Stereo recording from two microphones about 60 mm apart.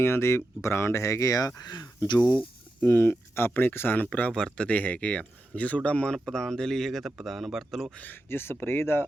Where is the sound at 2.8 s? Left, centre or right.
Left; by 7.9 s centre.